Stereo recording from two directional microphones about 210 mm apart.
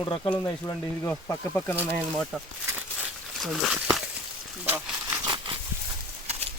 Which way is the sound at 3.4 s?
Centre (ahead or behind).